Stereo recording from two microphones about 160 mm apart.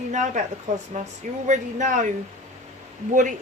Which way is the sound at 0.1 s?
50° right (ahead or behind).